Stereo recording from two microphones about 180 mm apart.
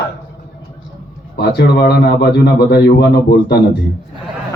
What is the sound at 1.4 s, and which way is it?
A man's voice, 65° left (ahead or behind).